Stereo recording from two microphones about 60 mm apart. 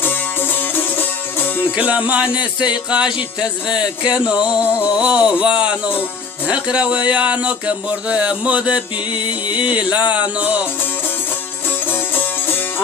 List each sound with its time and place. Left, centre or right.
0.6 s music: left
1.7 s music: right
11.9 s music: left